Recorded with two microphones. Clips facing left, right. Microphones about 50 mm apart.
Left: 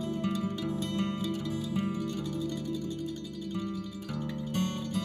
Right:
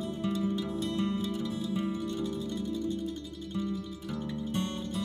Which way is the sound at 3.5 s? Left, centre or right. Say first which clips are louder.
Right 3 dB; left.